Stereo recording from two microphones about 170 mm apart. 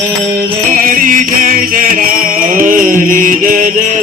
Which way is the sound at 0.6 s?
50° right (ahead or behind).